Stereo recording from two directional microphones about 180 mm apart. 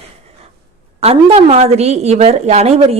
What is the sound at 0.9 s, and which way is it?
A woman's voice, 35° right (ahead or behind).